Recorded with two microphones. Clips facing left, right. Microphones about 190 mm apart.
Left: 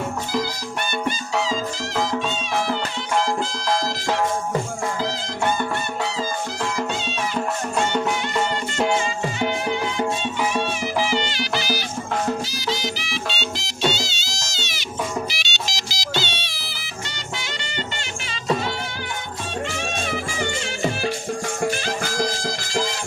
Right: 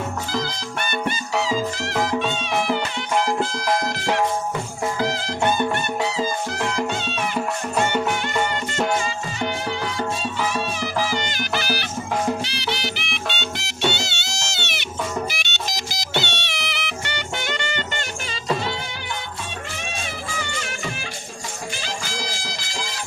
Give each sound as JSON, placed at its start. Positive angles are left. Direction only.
{"t": 1.9, "sound": "music", "side_deg": -5}
{"t": 2.1, "sound": "music", "side_deg": -20}
{"t": 7.3, "sound": "music", "side_deg": -5}
{"t": 9.4, "sound": "music", "side_deg": 15}
{"t": 11.2, "sound": "music", "side_deg": -50}
{"t": 12.5, "sound": "music", "side_deg": -65}
{"t": 15.3, "sound": "music", "side_deg": -55}
{"t": 21.6, "sound": "music", "side_deg": 55}